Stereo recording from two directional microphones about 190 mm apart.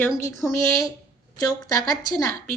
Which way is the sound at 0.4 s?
15° left (ahead or behind).